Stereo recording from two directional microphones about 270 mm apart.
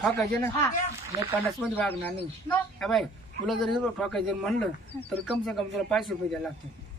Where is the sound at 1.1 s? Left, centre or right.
Centre.